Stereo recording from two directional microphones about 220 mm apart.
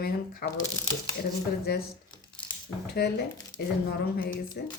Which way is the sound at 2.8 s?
45° left (ahead or behind).